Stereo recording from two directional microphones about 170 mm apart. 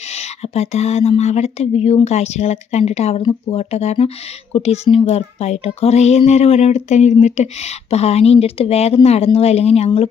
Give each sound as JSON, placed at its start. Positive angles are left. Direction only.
{"t": 0.1, "sound": "speech", "side_deg": 40}